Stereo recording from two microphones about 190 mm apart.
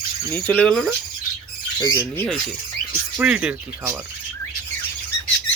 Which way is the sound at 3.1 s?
5° right (ahead or behind).